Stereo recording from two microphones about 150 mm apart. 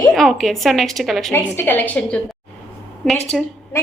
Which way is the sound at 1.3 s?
15° left (ahead or behind).